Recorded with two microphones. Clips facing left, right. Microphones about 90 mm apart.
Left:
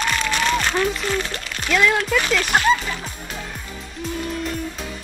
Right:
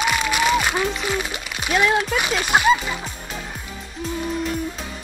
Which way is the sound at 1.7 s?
20° right (ahead or behind).